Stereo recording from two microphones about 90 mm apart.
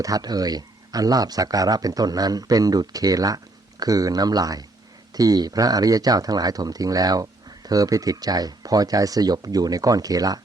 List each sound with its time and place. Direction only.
0.0 s speech: 45° right (ahead or behind)